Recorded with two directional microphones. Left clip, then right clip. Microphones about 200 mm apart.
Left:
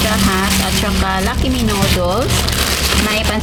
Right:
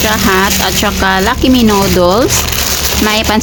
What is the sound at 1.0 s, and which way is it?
Speech, 60° right (ahead or behind).